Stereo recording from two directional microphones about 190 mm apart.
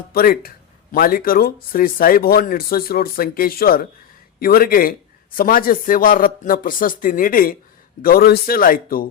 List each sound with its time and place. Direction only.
0.1 s speech: 50° left (ahead or behind)